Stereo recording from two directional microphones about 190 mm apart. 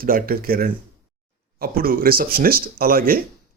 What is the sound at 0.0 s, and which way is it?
Speech, 50° right (ahead or behind).